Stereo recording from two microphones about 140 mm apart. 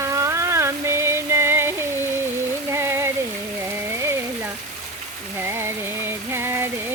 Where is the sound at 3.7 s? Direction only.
20° right (ahead or behind).